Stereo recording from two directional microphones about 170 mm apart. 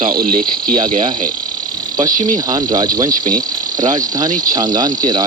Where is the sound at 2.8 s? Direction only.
50° right (ahead or behind).